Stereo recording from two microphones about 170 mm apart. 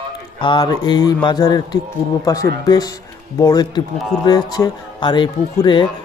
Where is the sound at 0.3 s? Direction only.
30° left (ahead or behind).